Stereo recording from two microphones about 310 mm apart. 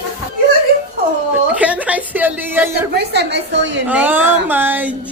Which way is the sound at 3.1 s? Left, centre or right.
Right.